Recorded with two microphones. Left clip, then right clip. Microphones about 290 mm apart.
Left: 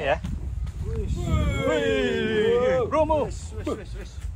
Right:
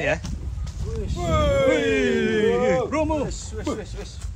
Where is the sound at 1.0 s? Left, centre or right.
Right.